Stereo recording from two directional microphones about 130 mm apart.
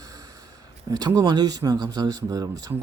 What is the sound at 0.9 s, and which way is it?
Speech, 30° right (ahead or behind).